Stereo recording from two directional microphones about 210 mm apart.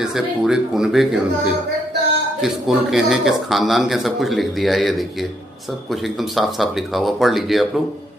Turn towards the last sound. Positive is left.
turn(degrees=0)  # may be behind; listen again after turning